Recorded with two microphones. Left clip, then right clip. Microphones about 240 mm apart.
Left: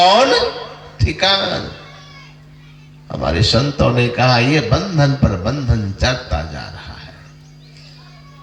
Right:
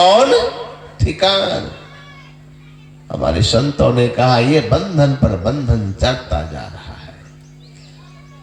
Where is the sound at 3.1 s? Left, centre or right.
Left.